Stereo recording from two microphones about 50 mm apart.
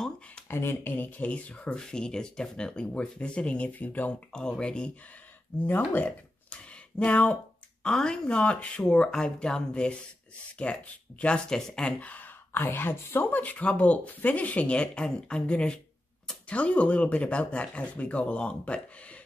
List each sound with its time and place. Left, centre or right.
0.5 s speech: left
4.3 s speech: centre
5.9 s a sound: left
7.8 s speech: centre
12.0 s speech: left
13.3 s speech: left